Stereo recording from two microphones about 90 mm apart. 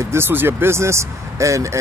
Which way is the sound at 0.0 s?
30° right (ahead or behind).